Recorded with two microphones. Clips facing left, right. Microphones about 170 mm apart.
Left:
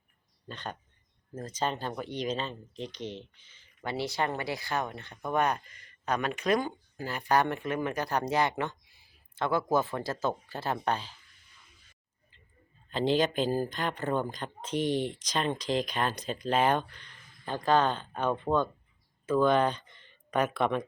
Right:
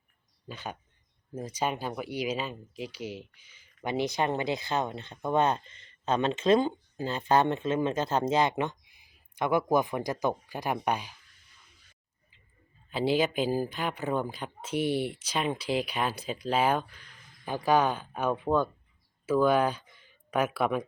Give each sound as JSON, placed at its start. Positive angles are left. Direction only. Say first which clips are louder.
{"t": 0.4, "sound": "speech", "louder": "right 1 dB", "side_deg": -5}
{"t": 12.9, "sound": "speech", "louder": "even", "side_deg": -10}